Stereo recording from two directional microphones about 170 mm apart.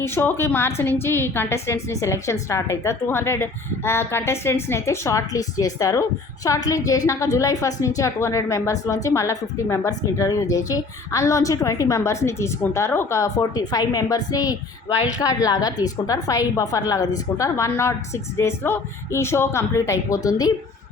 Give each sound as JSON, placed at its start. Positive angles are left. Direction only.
{"t": 0.0, "sound": "a woman's voice", "side_deg": 15}